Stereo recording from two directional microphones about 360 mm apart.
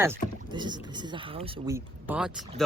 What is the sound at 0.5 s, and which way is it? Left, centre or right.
Speech, centre.